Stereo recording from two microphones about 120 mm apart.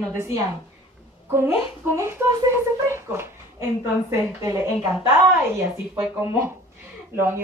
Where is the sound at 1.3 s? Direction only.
20° right (ahead or behind).